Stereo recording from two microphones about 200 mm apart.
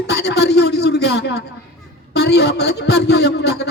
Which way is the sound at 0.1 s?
55° left (ahead or behind).